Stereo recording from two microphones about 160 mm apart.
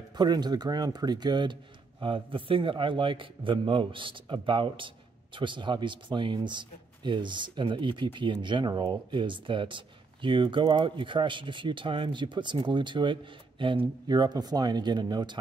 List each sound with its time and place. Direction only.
0.1 s speech: 25° right (ahead or behind)